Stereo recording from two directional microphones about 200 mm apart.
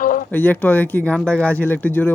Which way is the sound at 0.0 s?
45° left (ahead or behind).